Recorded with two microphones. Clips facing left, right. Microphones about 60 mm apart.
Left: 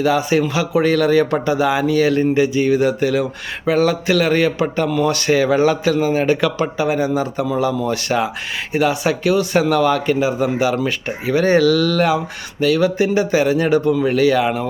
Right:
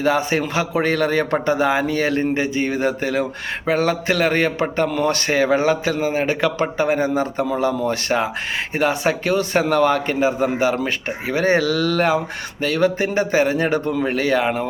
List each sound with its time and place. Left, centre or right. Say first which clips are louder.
0.0 s a man's voice: left 3 dB; right